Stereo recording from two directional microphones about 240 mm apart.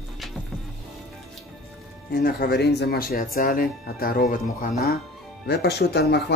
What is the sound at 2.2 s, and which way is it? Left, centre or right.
Speech, left.